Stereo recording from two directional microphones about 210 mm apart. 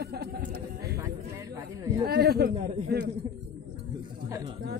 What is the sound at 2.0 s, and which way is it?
Speech, 45° right (ahead or behind).